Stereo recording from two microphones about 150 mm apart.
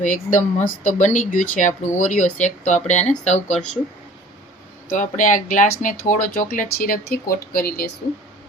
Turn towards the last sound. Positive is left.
turn(degrees=85)